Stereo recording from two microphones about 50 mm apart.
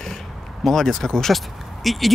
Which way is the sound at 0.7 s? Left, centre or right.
Centre.